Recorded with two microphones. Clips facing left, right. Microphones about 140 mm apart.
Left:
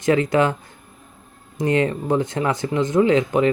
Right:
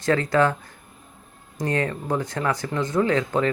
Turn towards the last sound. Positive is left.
turn(degrees=20)  # may be behind; listen again after turning